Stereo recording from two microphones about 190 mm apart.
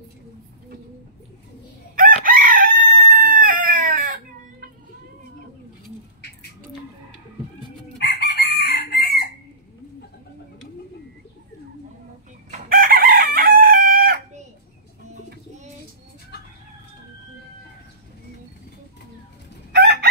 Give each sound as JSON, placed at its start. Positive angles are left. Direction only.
{"t": 2.2, "sound": "chicken", "side_deg": -50}
{"t": 8.0, "sound": "chicken", "side_deg": 60}
{"t": 12.4, "sound": "chicken", "side_deg": -50}
{"t": 19.7, "sound": "crowing", "side_deg": -60}